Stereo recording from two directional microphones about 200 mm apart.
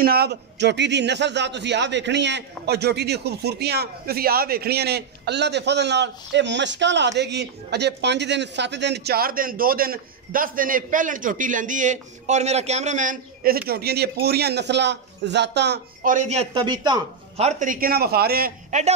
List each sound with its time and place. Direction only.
0.0 s a man's voice: 50° right (ahead or behind); by 17.5 s 20° right (ahead or behind)
17.5 s a man's voice: 40° right (ahead or behind)
18.7 s a man's voice: 35° right (ahead or behind)